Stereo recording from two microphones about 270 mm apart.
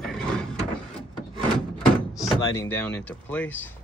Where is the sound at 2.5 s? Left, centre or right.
Centre.